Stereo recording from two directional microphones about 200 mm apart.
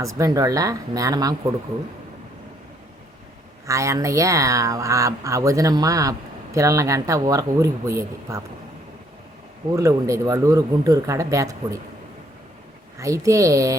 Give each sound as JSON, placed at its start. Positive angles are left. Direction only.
{"t": 0.2, "sound": "speech", "side_deg": -15}
{"t": 3.7, "sound": "speech", "side_deg": -15}
{"t": 9.7, "sound": "speech", "side_deg": -15}
{"t": 13.0, "sound": "speech", "side_deg": -15}